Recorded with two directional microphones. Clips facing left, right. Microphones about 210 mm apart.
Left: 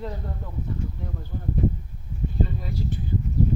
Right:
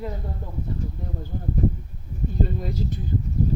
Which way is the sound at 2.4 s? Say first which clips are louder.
Right 3 dB; 40° right (ahead or behind).